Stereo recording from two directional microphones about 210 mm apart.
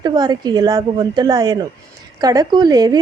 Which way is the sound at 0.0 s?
20° right (ahead or behind).